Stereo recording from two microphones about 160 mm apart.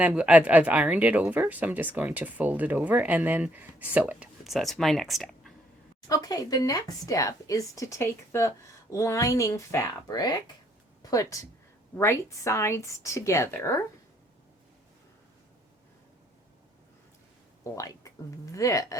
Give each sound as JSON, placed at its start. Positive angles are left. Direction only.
{"t": 0.0, "sound": "speech", "side_deg": -10}
{"t": 6.1, "sound": "a woman's voice", "side_deg": 25}
{"t": 17.6, "sound": "speech", "side_deg": 20}